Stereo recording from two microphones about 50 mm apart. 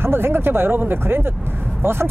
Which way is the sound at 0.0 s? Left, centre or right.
Right.